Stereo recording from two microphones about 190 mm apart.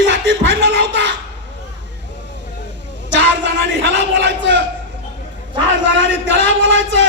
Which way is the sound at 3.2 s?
70° right (ahead or behind).